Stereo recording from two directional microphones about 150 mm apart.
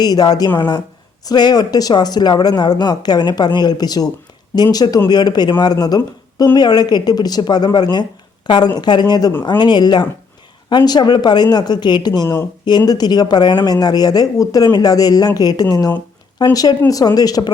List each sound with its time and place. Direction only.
0.0 s speech: 25° left (ahead or behind)